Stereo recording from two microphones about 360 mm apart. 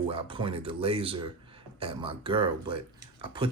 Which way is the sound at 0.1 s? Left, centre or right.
Centre.